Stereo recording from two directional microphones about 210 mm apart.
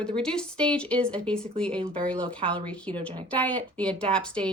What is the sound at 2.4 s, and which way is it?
Speech, 25° right (ahead or behind).